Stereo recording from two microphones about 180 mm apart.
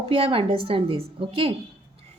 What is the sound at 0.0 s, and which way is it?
A woman's voice, 30° right (ahead or behind).